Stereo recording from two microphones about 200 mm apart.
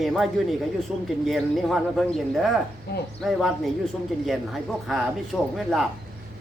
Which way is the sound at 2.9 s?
50° left (ahead or behind).